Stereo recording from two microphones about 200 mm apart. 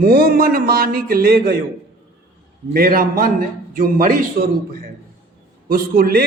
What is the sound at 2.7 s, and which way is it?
A man's voice, 45° right (ahead or behind).